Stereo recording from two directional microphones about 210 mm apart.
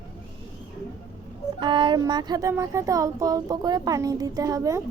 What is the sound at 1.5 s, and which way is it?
Speech, 25° right (ahead or behind).